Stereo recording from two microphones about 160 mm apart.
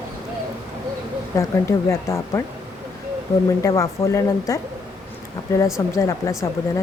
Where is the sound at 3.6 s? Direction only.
20° left (ahead or behind).